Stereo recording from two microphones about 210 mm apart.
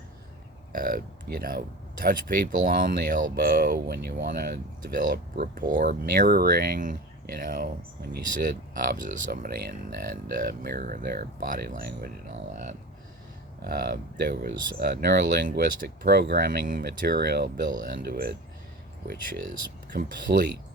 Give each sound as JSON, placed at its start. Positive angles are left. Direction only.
{"t": 0.7, "sound": "speech", "side_deg": -40}
{"t": 8.7, "sound": "speech", "side_deg": -40}
{"t": 13.6, "sound": "speech", "side_deg": -45}